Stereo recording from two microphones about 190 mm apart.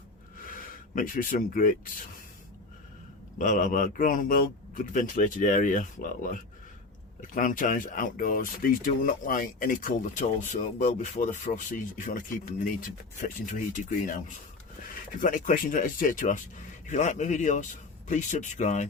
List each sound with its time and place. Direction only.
0.3 s rub: 45° left (ahead or behind)
3.3 s speech: 40° left (ahead or behind)
15.2 s speech: 45° left (ahead or behind)